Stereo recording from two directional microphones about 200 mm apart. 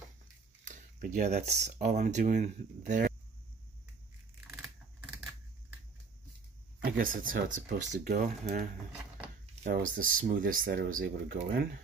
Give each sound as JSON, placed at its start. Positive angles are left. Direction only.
{"t": 0.7, "sound": "a sound", "side_deg": -40}
{"t": 1.6, "sound": "speech", "side_deg": -35}
{"t": 6.8, "sound": "speech", "side_deg": -45}